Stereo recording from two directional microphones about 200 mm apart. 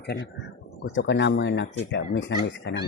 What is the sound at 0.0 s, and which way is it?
Speech, 55° left (ahead or behind).